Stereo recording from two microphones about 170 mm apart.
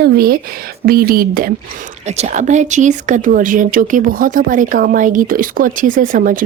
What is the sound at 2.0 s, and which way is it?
Speech, 40° right (ahead or behind).